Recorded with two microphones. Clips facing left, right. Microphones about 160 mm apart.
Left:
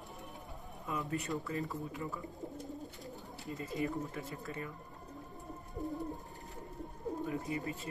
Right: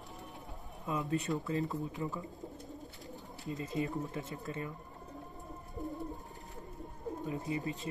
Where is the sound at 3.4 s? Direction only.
20° right (ahead or behind).